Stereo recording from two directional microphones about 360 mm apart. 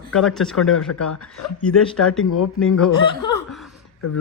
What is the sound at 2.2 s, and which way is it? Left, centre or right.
Speech, left.